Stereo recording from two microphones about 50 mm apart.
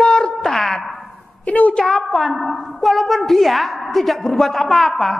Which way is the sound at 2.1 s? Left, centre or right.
Centre.